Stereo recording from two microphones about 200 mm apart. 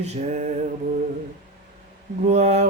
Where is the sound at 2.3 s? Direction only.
35° right (ahead or behind).